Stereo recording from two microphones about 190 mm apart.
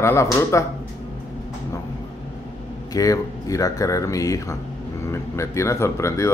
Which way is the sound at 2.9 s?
20° left (ahead or behind).